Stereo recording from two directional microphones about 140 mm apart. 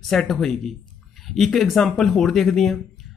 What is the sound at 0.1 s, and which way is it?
Speech, 5° left (ahead or behind).